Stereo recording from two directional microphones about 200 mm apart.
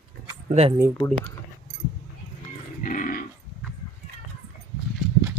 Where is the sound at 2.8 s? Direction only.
45° left (ahead or behind).